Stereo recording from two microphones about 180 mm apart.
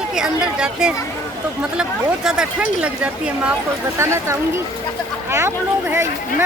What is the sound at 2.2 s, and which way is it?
Speech, 5° right (ahead or behind).